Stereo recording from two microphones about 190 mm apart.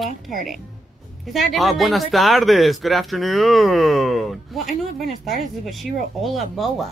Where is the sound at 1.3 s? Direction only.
Centre (ahead or behind).